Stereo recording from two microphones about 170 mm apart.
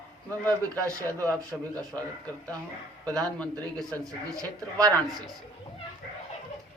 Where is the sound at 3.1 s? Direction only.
5° left (ahead or behind).